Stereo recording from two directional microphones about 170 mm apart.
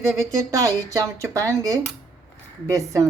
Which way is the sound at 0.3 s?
20° right (ahead or behind).